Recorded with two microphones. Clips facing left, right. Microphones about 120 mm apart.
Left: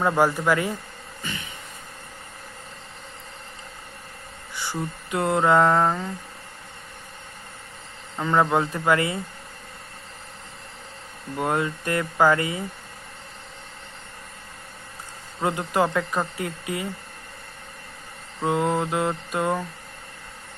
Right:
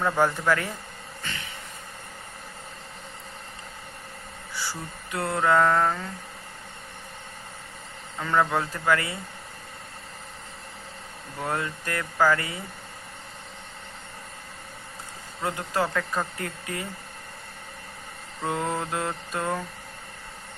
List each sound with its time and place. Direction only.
0.0 s speech: 15° left (ahead or behind)
4.5 s mantra: 20° left (ahead or behind)
8.2 s speech: 20° left (ahead or behind)
11.3 s speech: 20° left (ahead or behind)
15.4 s speech: 20° left (ahead or behind)
18.4 s speech: 10° left (ahead or behind)